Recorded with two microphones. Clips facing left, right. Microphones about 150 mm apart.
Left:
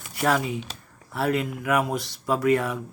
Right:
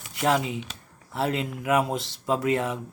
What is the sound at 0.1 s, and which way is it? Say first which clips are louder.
Speech: even; 20° right (ahead or behind).